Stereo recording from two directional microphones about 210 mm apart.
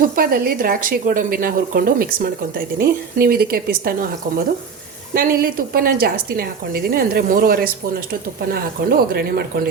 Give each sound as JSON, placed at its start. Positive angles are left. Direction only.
{"t": 0.0, "sound": "a woman's voice", "side_deg": -45}
{"t": 5.1, "sound": "a woman's voice", "side_deg": -45}